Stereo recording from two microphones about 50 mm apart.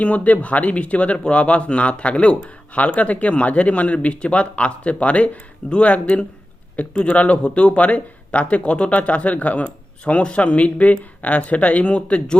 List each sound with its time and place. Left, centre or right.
0.0 s speech: left